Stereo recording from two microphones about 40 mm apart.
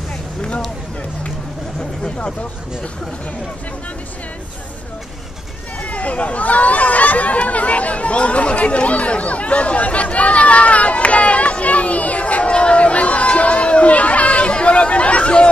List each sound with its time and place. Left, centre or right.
5.8 s speech: left